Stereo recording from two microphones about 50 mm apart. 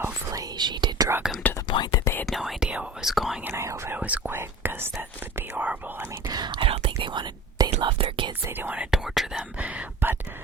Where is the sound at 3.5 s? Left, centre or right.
Right.